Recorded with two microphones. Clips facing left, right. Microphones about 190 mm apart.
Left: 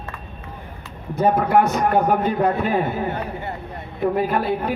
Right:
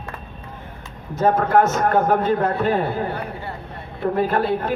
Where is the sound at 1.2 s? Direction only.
15° left (ahead or behind).